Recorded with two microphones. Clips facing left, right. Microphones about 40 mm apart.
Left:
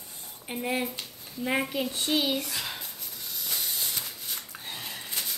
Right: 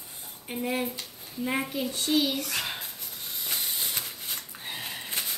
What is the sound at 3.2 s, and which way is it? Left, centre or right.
Hiss, right.